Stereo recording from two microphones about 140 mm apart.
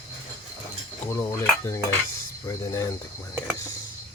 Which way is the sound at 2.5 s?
25° left (ahead or behind).